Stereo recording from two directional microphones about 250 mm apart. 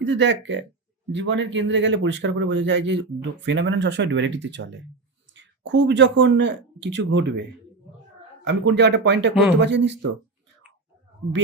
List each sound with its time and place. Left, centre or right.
0.0 s speech: right
8.4 s speech: right